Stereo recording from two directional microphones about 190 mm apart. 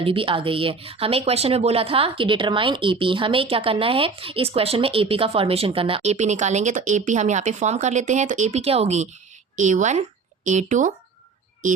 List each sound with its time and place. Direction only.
0.0 s speech: 30° right (ahead or behind)